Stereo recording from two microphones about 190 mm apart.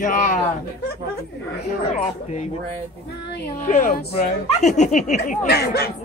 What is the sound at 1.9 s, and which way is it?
Speech, 35° left (ahead or behind).